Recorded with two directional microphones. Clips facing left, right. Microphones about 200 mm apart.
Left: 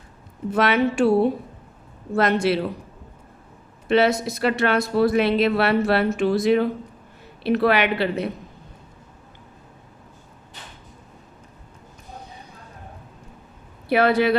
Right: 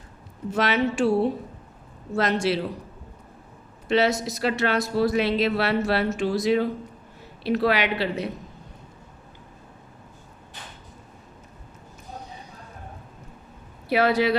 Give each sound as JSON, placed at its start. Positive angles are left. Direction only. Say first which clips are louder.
{"t": 0.5, "sound": "speech", "louder": "left 3 dB", "side_deg": 55}
{"t": 3.8, "sound": "speech", "louder": "left 3 dB", "side_deg": 55}
{"t": 13.8, "sound": "speech", "louder": "left 3 dB", "side_deg": 55}